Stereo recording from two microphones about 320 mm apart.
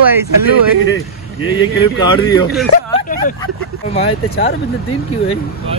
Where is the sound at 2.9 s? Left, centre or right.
Left.